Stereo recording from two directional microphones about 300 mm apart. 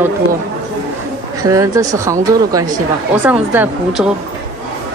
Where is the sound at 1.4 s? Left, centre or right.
Centre.